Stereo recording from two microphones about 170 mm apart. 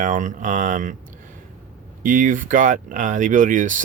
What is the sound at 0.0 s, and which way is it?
Speech, 50° right (ahead or behind).